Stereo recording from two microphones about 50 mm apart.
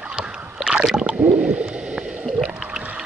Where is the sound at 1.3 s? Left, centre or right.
Right.